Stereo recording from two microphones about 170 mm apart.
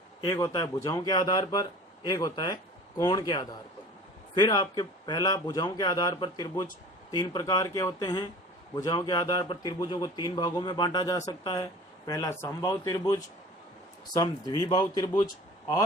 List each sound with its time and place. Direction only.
0.3 s a man's voice: 20° left (ahead or behind)